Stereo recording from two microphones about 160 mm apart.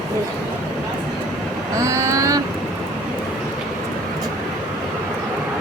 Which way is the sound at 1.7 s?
20° right (ahead or behind).